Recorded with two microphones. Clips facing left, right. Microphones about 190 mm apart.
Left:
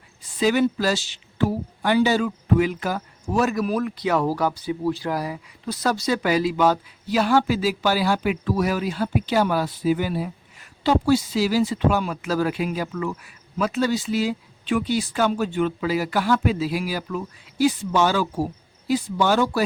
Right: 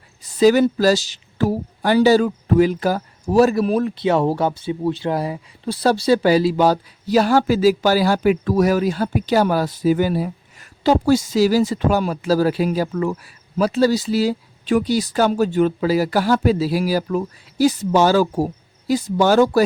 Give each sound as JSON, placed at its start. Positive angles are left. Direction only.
{"t": 0.2, "sound": "speech", "side_deg": -40}